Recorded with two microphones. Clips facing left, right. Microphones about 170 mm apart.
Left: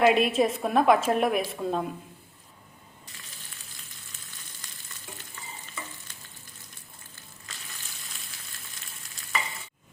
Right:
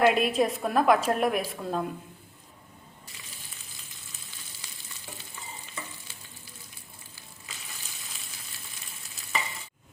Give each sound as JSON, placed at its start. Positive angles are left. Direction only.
{"t": 0.0, "sound": "a woman's voice", "side_deg": 0}